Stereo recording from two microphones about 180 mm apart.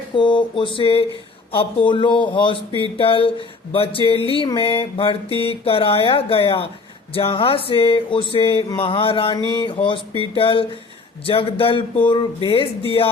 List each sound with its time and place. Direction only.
0.2 s speech: 25° left (ahead or behind)